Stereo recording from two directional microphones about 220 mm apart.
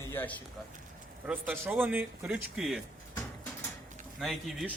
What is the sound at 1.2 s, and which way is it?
Speech, 5° right (ahead or behind).